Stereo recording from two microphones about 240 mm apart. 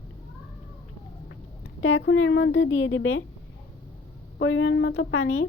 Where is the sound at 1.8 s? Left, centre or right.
Left.